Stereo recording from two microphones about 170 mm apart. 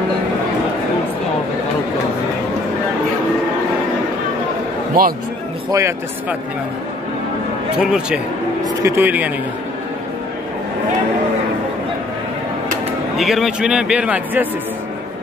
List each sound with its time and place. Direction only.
5.0 s speech: 60° right (ahead or behind)
5.7 s speech: 15° right (ahead or behind)
7.8 s a man's voice: 5° right (ahead or behind)
13.2 s a man's voice: centre (ahead or behind)